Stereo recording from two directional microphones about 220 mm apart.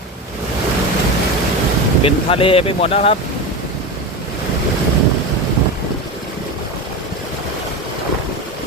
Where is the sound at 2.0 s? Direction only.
25° left (ahead or behind).